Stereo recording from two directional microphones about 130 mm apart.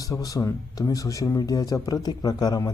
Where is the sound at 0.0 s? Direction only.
25° left (ahead or behind).